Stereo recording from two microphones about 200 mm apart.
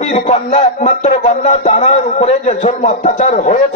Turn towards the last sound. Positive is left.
turn(degrees=35)  # may be behind; listen again after turning